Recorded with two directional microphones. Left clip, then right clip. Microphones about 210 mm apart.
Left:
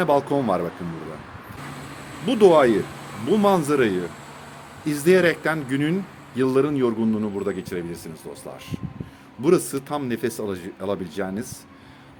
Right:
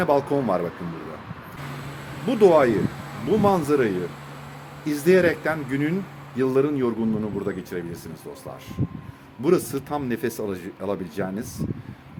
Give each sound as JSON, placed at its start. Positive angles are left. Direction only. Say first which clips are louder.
{"t": 0.0, "sound": "speech", "louder": "left 1 dB", "side_deg": 15}
{"t": 2.2, "sound": "a man's voice", "louder": "left 1 dB", "side_deg": 20}
{"t": 9.4, "sound": "speech", "louder": "left 2 dB", "side_deg": 10}